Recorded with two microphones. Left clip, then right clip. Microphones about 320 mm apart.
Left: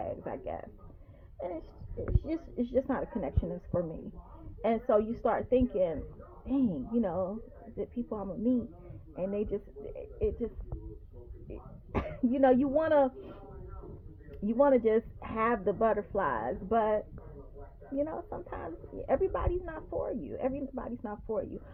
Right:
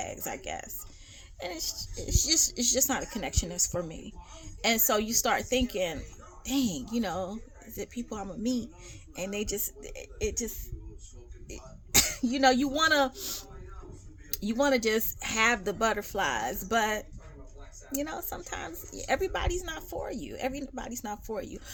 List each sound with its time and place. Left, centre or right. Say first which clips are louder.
0.0 s a woman's voice: even; right
14.4 s speech: left 1 dB; right